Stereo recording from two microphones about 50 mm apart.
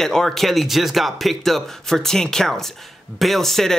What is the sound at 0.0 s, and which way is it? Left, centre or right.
A man's voice, centre.